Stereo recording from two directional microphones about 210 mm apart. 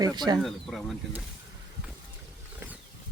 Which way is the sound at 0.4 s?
Centre (ahead or behind).